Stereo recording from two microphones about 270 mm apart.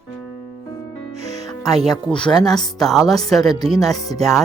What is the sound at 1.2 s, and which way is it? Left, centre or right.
Music, centre.